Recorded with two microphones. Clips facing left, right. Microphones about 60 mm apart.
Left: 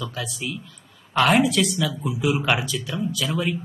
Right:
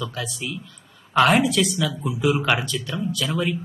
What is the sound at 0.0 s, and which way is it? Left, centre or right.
Speech, centre.